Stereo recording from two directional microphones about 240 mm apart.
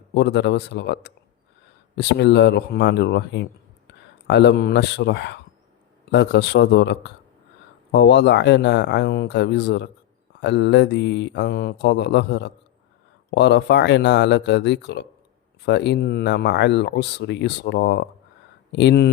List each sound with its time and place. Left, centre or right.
0.1 s speech: left